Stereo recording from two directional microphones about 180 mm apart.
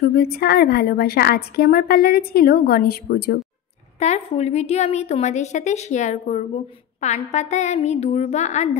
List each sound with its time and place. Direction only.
0.1 s a woman's voice: 60° left (ahead or behind)
4.0 s a woman's voice: 40° left (ahead or behind)